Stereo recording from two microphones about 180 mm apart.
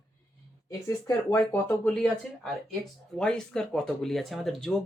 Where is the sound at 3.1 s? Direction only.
5° left (ahead or behind).